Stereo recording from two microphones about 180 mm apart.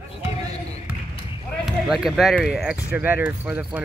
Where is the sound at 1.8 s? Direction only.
Centre (ahead or behind).